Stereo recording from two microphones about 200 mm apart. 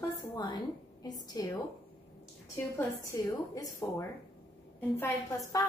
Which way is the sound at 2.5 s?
15° left (ahead or behind).